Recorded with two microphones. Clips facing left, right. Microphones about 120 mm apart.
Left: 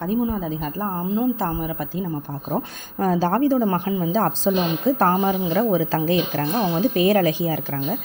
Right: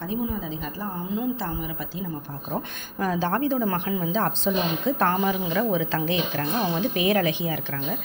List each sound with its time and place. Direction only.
0.0 s a woman's voice: 45° left (ahead or behind)